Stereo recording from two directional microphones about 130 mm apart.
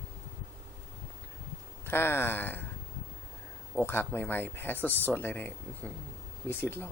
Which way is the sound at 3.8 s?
15° left (ahead or behind).